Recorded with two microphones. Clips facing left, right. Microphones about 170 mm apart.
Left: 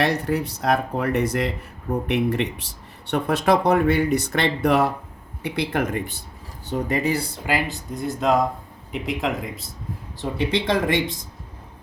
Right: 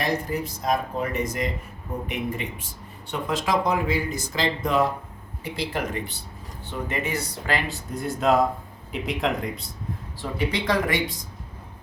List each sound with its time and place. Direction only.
0.0 s speech: 70° left (ahead or behind)
5.4 s speech: 60° left (ahead or behind)
6.7 s speech: 40° left (ahead or behind)
7.7 s speech: centre (ahead or behind)
10.2 s speech: 25° left (ahead or behind)